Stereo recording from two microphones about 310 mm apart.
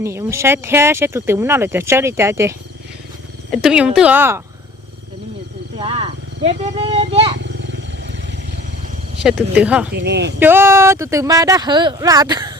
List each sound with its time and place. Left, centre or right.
0.0 s a woman's voice: centre
5.8 s speech: centre
7.4 s wild animals: right
9.2 s a woman's voice: centre
9.9 s speech: right
10.4 s speech: centre